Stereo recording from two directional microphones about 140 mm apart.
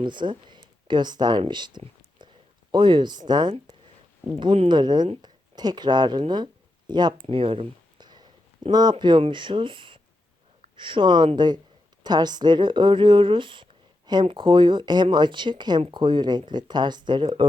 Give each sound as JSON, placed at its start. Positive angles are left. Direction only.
{"t": 0.0, "sound": "speech", "side_deg": -35}
{"t": 7.3, "sound": "a sound", "side_deg": -40}
{"t": 8.7, "sound": "speech", "side_deg": -30}